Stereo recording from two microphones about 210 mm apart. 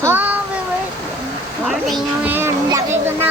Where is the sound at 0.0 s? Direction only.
10° right (ahead or behind).